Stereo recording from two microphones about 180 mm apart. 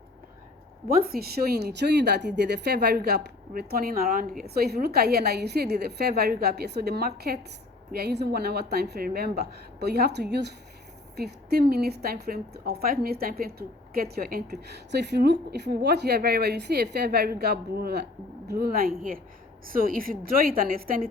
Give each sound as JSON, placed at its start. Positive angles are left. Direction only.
{"t": 0.9, "sound": "a woman's voice", "side_deg": -55}